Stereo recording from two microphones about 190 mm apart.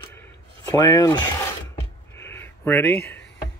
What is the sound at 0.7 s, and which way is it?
Speech, 15° left (ahead or behind).